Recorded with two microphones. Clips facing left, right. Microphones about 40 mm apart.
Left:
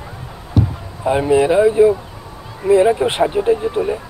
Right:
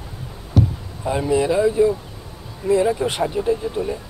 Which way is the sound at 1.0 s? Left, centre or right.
Left.